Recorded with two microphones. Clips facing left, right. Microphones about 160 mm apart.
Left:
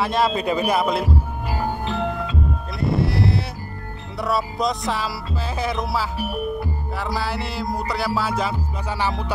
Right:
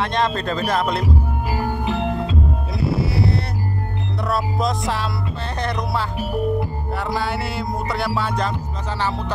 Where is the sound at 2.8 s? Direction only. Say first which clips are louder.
Even; 5° right (ahead or behind).